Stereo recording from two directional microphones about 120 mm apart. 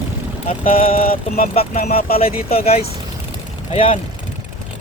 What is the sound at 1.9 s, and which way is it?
Speech, 55° left (ahead or behind).